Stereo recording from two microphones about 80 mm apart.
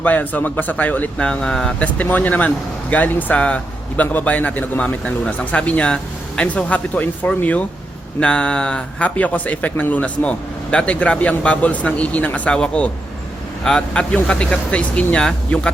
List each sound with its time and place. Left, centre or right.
0.0 s speech: left